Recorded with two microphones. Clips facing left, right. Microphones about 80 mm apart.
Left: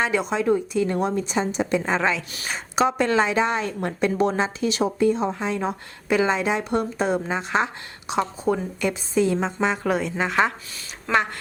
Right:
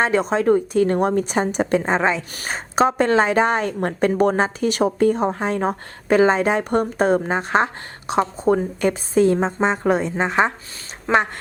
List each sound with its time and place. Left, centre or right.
0.0 s a woman's voice: right
1.8 s a woman's voice: right
2.1 s a woman's voice: right